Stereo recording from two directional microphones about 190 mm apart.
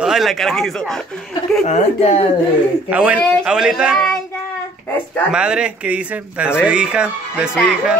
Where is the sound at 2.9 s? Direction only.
5° right (ahead or behind).